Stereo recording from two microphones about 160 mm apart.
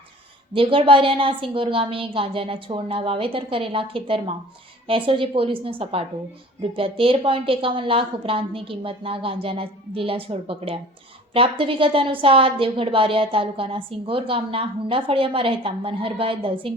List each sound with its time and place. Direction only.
0.5 s a woman's voice: 35° right (ahead or behind)